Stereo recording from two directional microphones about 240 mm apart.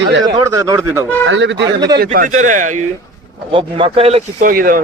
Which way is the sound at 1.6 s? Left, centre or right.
Centre.